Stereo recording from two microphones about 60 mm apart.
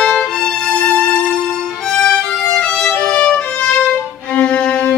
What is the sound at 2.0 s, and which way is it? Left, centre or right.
Music, centre.